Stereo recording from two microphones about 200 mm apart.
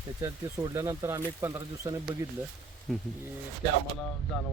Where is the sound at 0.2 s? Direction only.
15° right (ahead or behind).